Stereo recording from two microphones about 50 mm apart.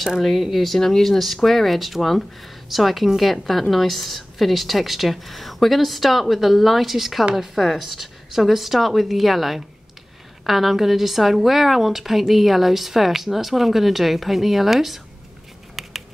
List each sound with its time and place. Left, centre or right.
0.2 s a woman's voice: centre
15.8 s typing: centre